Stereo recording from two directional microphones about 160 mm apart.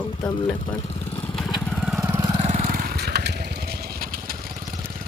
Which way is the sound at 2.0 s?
15° right (ahead or behind).